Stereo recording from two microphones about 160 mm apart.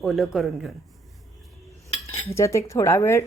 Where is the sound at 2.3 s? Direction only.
20° left (ahead or behind).